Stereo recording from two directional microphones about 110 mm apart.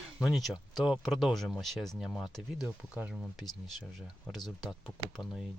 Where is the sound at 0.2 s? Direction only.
Centre (ahead or behind).